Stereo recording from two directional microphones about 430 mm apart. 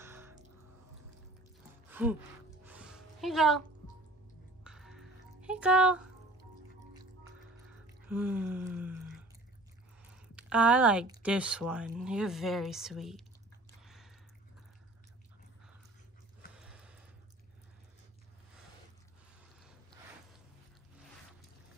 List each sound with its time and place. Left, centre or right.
0.0 s crow: centre
1.9 s music: centre
2.6 s a sound: centre
4.6 s music: centre
8.1 s a sound: centre
10.1 s a sound: centre
11.2 s speech: centre
13.8 s drip: centre
16.5 s gasp: centre